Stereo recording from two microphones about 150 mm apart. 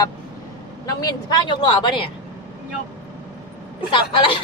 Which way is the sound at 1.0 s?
30° left (ahead or behind).